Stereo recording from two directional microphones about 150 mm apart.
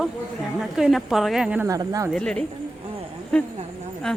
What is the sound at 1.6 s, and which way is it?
Speech, 25° right (ahead or behind).